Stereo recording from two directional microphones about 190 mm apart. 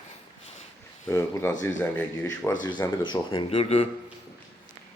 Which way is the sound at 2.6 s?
20° left (ahead or behind).